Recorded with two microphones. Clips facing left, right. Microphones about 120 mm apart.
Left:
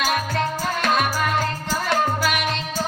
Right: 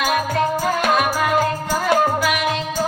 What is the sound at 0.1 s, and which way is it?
Music, 15° right (ahead or behind).